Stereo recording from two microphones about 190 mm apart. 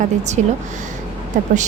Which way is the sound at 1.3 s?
45° right (ahead or behind).